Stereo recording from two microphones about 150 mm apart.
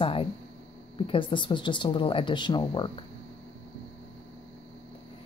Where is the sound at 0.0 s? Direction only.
35° left (ahead or behind).